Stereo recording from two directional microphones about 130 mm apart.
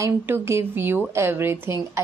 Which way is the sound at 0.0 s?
20° right (ahead or behind).